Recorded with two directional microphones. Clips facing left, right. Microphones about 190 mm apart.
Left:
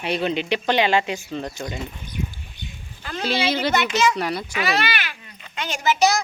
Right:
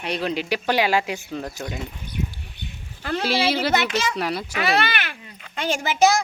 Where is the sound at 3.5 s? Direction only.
5° right (ahead or behind).